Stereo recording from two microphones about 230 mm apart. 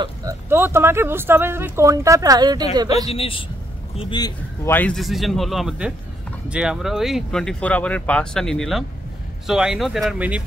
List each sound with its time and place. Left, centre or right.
0.0 s speech: centre
3.1 s a man's voice: left; by 10.4 s centre